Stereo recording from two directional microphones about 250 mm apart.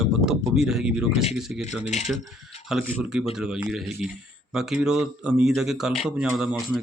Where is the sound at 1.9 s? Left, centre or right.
Left.